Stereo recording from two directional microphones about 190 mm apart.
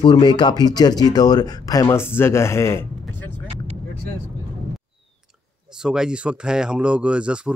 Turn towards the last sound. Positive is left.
turn(degrees=-5)  # may be behind; listen again after turning